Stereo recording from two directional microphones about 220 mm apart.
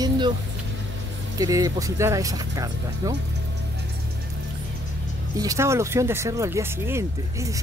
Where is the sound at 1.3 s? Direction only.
15° right (ahead or behind).